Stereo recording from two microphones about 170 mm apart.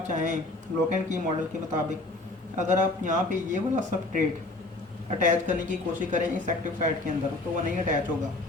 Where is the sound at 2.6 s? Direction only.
45° right (ahead or behind).